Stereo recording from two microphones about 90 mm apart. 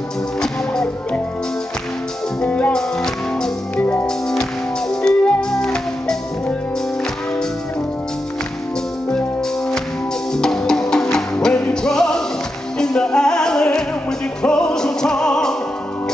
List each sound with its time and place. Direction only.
0.4 s music: 10° left (ahead or behind)
2.4 s music: 15° left (ahead or behind)
3.7 s music: 20° left (ahead or behind)
4.0 s music: 5° left (ahead or behind)
10.3 s music: 5° left (ahead or behind)